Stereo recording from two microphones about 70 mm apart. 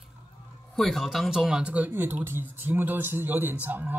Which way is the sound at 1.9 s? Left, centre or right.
Right.